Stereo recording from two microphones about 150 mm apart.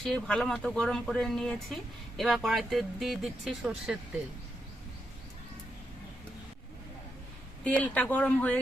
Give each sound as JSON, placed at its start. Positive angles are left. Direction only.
{"t": 0.0, "sound": "speech", "side_deg": 5}
{"t": 7.6, "sound": "speech", "side_deg": 10}